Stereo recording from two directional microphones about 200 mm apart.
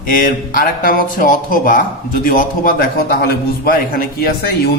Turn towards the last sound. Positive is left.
turn(degrees=50)  # may be behind; listen again after turning